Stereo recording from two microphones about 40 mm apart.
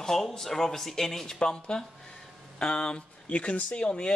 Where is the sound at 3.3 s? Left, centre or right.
Left.